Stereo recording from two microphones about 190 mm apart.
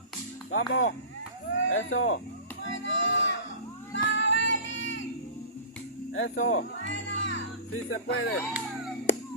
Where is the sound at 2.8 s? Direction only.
75° left (ahead or behind).